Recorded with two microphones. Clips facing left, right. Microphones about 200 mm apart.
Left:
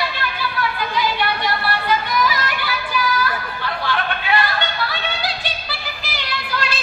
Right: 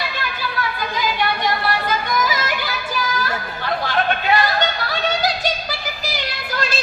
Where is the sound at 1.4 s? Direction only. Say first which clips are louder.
Right 2 dB; 45° right (ahead or behind).